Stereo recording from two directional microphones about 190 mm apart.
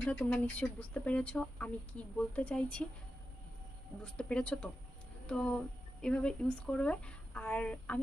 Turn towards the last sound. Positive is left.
turn(degrees=5)  # may be behind; listen again after turning